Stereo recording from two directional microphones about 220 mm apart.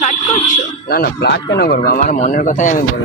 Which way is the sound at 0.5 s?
45° left (ahead or behind).